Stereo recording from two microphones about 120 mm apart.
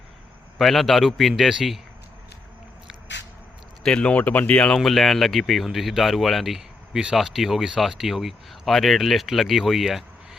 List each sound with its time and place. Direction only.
0.6 s speech: centre (ahead or behind)
3.8 s speech: 10° left (ahead or behind)